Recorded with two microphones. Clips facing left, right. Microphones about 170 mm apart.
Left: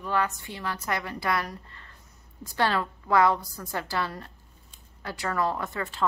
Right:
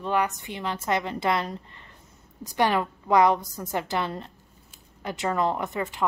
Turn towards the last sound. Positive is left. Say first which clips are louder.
# right 2 dB
turn(degrees=-20)  # may be behind; listen again after turning